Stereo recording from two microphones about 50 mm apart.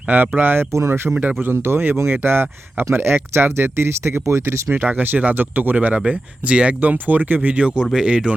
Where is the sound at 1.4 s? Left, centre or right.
Right.